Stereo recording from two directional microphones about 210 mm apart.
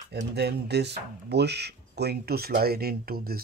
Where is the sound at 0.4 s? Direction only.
50° right (ahead or behind).